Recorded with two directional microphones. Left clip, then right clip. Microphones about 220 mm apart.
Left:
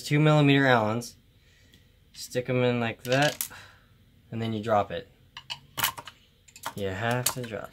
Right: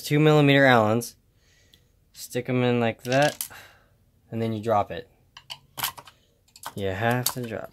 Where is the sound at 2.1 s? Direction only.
45° right (ahead or behind).